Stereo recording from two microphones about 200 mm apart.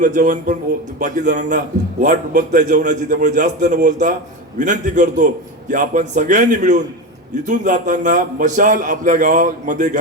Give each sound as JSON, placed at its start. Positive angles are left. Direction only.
{"t": 0.0, "sound": "a man's voice", "side_deg": -40}